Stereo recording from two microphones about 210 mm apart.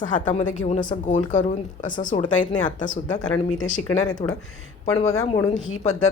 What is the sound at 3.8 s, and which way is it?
Speech, 20° left (ahead or behind).